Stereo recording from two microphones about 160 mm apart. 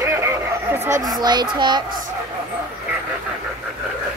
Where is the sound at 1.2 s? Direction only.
25° right (ahead or behind).